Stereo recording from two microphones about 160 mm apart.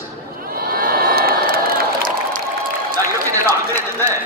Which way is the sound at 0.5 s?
65° right (ahead or behind).